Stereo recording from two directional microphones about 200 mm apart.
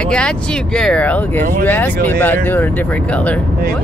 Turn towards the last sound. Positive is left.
turn(degrees=5)  # may be behind; listen again after turning